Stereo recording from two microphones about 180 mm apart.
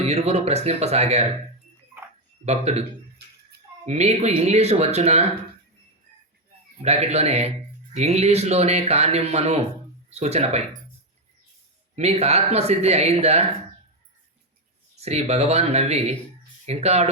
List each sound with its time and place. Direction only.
0.0 s speech: 35° right (ahead or behind)
2.4 s speech: 35° right (ahead or behind)
3.8 s speech: 35° right (ahead or behind)
6.8 s speech: 35° right (ahead or behind)
11.9 s speech: 35° right (ahead or behind)
15.0 s speech: 35° right (ahead or behind)